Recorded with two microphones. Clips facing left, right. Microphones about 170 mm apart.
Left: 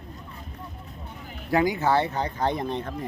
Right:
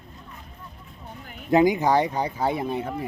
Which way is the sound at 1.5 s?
20° right (ahead or behind).